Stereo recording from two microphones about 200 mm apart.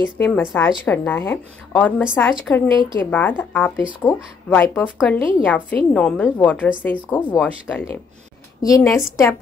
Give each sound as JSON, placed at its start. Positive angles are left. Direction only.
{"t": 0.2, "sound": "speech", "side_deg": 5}
{"t": 8.6, "sound": "speech", "side_deg": 15}